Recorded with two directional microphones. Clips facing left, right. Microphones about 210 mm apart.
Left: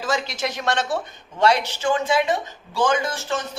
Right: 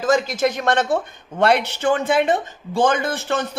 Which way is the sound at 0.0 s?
50° right (ahead or behind).